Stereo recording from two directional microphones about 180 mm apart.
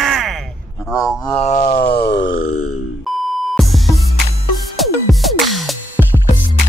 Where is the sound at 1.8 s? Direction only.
65° left (ahead or behind); by 2.4 s 80° left.